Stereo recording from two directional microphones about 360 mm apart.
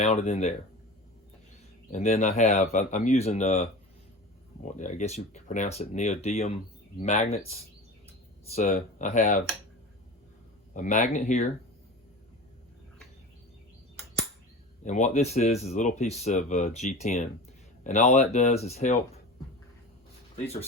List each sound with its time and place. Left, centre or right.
0.0 s speech: centre
1.9 s speech: centre
4.8 s speech: centre
10.8 s speech: left
14.8 s speech: centre
20.3 s speech: centre